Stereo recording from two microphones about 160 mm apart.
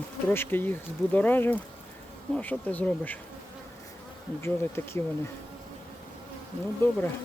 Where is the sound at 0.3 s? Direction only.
10° left (ahead or behind).